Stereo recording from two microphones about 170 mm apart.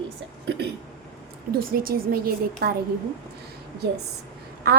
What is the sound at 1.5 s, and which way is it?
A woman's voice, 60° right (ahead or behind).